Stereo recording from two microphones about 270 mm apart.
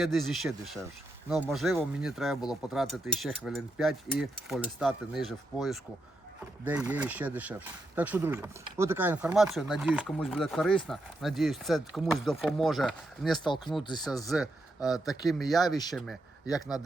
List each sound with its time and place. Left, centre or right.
0.0 s speech: centre
13.4 s speech: centre
14.3 s speech: centre